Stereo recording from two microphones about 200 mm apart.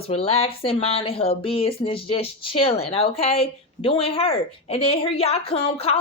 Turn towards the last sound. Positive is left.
turn(degrees=30)  # may be behind; listen again after turning